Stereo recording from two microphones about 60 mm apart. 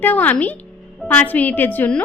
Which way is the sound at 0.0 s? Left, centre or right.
Left.